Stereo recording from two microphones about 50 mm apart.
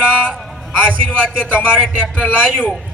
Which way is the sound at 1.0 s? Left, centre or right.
Centre.